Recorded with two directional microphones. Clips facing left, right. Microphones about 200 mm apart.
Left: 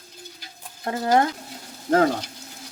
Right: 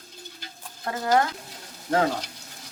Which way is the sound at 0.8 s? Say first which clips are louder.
Left 3 dB; 25° left (ahead or behind).